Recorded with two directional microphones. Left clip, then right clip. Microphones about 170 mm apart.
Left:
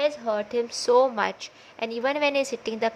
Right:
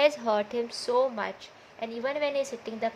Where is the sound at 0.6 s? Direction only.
20° left (ahead or behind).